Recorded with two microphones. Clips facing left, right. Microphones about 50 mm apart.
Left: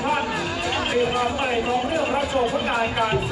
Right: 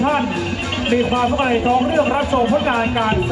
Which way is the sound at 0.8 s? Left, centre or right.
Right.